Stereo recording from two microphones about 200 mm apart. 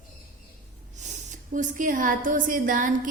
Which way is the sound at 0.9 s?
35° right (ahead or behind).